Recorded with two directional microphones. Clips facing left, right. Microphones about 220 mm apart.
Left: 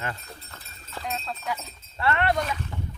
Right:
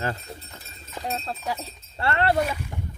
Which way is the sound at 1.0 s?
35° right (ahead or behind).